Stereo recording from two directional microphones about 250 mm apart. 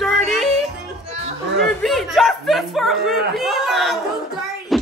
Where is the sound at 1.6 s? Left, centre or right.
Centre.